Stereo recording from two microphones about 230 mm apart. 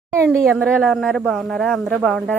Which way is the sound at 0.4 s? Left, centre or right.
Centre.